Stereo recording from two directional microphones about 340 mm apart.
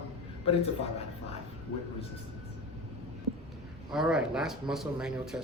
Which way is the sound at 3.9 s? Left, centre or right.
Centre.